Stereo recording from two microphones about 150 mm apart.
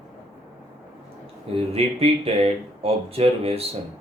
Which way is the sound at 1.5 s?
40° right (ahead or behind).